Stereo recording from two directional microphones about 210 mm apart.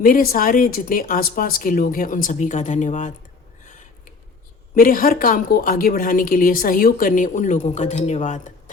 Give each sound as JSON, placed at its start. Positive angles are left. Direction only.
{"t": 0.0, "sound": "a woman's voice", "side_deg": 45}
{"t": 4.7, "sound": "a woman's voice", "side_deg": 40}